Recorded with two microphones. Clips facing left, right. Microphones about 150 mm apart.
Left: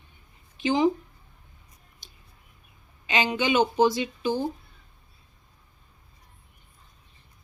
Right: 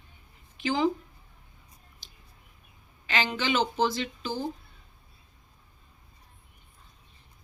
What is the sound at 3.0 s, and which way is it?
Speech, 20° left (ahead or behind).